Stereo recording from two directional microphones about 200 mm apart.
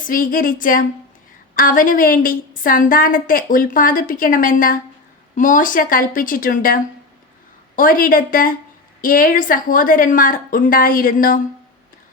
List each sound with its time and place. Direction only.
0.0 s a woman's voice: 45° left (ahead or behind)
7.8 s a woman's voice: 45° left (ahead or behind)